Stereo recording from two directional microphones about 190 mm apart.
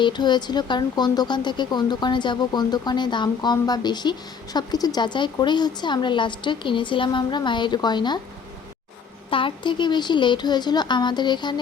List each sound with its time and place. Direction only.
0.0 s speech: 25° left (ahead or behind)
9.3 s speech: 25° left (ahead or behind)